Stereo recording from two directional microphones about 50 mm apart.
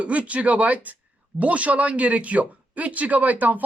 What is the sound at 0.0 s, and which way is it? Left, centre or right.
Speech, right.